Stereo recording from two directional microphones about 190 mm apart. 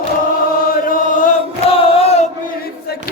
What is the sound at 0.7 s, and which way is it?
Chant, 45° left (ahead or behind).